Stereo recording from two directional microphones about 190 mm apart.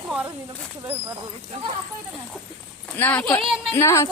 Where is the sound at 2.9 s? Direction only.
10° left (ahead or behind).